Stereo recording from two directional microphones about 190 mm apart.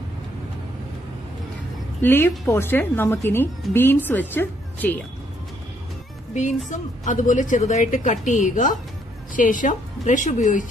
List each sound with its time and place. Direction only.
2.0 s a woman's voice: 10° left (ahead or behind)
6.3 s a woman's voice: 40° left (ahead or behind)